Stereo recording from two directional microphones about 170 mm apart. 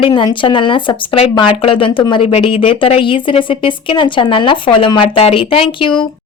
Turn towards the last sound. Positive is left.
turn(degrees=30)  # may be behind; listen again after turning